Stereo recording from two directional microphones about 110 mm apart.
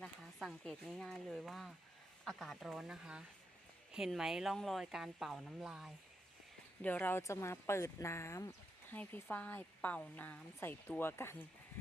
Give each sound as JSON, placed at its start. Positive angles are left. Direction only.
{"t": 0.0, "sound": "speech", "side_deg": 5}
{"t": 6.8, "sound": "speech", "side_deg": 15}